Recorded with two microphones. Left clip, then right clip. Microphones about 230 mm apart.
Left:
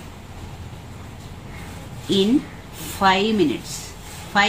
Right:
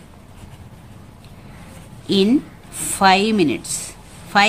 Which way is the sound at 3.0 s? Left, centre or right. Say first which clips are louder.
Right 3 dB; right.